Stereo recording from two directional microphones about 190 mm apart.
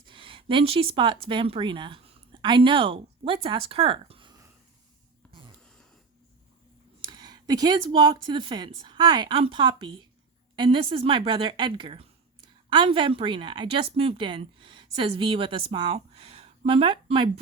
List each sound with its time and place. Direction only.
0.0 s speech: 25° right (ahead or behind)
5.3 s a sound: 25° right (ahead or behind)
7.0 s a woman's voice: 20° right (ahead or behind)